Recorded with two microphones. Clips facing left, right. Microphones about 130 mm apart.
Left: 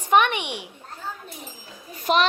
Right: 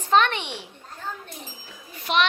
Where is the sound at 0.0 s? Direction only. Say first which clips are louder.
Left 1 dB; 15° left (ahead or behind).